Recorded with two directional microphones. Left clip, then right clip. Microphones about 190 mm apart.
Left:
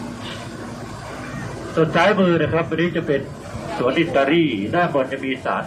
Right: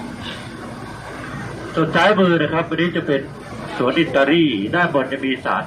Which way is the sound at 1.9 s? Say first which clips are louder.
Right 3 dB; 45° right (ahead or behind).